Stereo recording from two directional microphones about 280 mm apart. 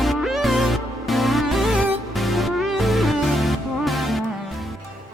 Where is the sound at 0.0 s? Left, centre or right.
Centre.